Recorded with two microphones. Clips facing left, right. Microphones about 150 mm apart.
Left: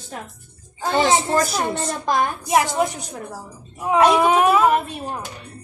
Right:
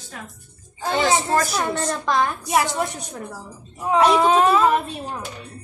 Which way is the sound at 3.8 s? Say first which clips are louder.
Left 1 dB; 10° left (ahead or behind).